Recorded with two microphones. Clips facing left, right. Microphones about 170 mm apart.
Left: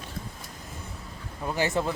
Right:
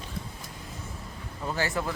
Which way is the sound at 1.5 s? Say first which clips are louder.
Left 4 dB; 20° left (ahead or behind).